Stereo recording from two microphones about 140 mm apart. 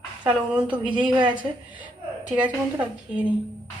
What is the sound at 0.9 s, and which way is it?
Speech, 35° right (ahead or behind).